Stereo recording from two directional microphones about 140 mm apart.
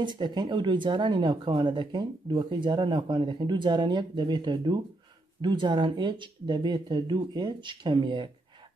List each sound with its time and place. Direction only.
0.0 s speech: 35° right (ahead or behind)